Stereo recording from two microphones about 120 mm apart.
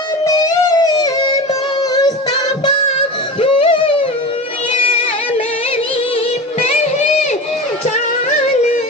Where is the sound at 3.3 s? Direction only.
45° left (ahead or behind).